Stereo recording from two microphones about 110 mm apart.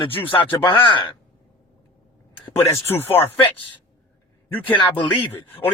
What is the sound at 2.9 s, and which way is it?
Speech, 20° left (ahead or behind).